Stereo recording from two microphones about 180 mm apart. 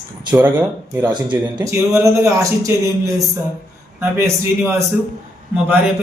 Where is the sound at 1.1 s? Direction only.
25° right (ahead or behind).